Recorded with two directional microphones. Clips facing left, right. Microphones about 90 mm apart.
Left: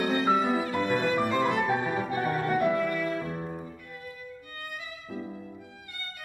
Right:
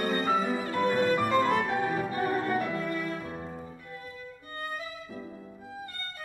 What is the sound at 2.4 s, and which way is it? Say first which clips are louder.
Music: left 4 dB; 30° right (ahead or behind).